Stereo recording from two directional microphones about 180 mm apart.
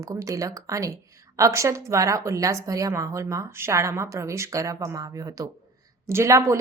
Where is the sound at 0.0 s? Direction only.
15° right (ahead or behind).